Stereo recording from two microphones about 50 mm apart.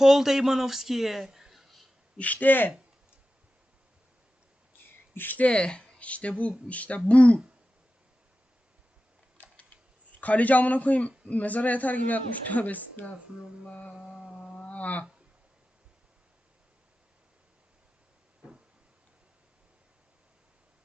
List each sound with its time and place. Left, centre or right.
0.0 s speech: centre
2.1 s a man's voice: left
5.1 s a man's voice: left
5.4 s speech: centre
9.4 s typing: left
10.2 s a man's voice: left
14.4 s cattle: centre
14.7 s cattle: left
18.4 s a sound: right